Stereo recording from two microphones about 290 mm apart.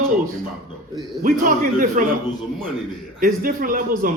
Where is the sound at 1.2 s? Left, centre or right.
Right.